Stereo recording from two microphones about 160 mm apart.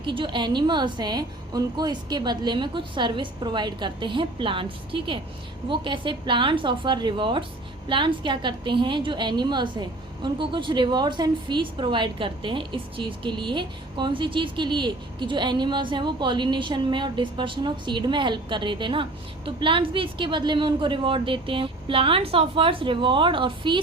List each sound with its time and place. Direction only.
0.0 s a woman's voice: 30° right (ahead or behind)